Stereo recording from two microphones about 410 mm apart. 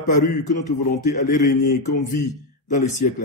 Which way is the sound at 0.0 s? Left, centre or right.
Centre.